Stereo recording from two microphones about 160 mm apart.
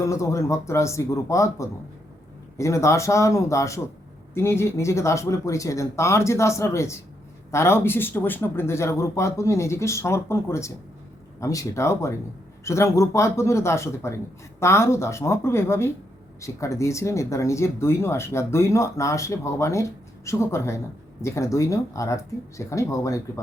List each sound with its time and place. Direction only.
0.0 s speech: 20° left (ahead or behind)